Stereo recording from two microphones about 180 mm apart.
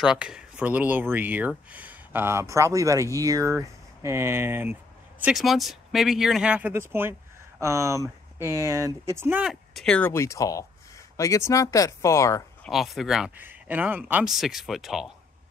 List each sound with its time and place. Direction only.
0.0 s speech: 5° right (ahead or behind); by 12.4 s 15° left (ahead or behind)
12.6 s speech: centre (ahead or behind)